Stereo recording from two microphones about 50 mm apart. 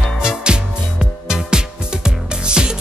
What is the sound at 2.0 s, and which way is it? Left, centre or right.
Music, centre.